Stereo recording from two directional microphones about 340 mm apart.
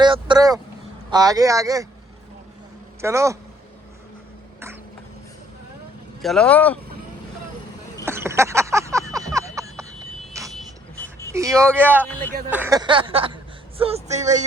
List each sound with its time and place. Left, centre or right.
0.0 s vehicle: centre
1.1 s speech: centre
3.0 s speech: centre
6.2 s speech: centre
8.0 s a sound: centre
10.3 s vehicle: centre
11.3 s speech: centre